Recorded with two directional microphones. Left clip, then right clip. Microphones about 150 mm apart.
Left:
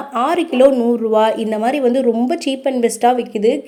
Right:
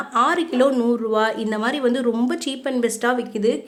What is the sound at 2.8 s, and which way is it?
Speech, 20° left (ahead or behind).